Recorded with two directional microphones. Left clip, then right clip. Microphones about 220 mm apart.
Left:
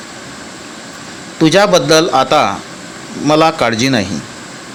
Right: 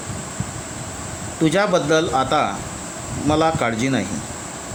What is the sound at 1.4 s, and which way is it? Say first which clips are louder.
Speech: left 8 dB; 20° left (ahead or behind).